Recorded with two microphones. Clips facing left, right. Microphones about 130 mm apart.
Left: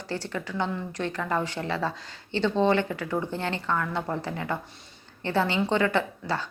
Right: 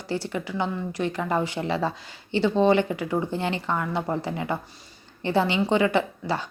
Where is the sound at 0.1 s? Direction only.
15° right (ahead or behind).